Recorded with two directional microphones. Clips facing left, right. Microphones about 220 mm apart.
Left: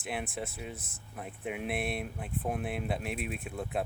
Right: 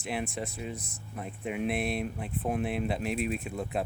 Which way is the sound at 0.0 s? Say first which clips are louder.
Right 3 dB; centre (ahead or behind).